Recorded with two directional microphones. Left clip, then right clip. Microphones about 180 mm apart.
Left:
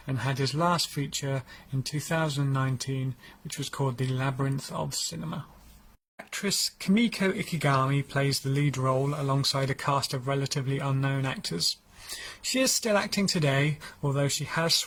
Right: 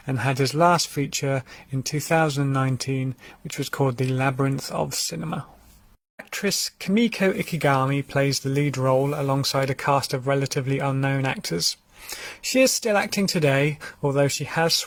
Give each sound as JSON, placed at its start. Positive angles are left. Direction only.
{"t": 0.1, "sound": "speech", "side_deg": -40}